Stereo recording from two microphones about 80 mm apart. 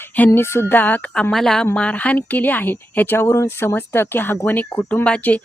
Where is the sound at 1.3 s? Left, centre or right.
Centre.